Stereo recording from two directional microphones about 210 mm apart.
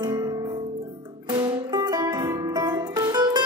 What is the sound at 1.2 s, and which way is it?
Music, 20° right (ahead or behind).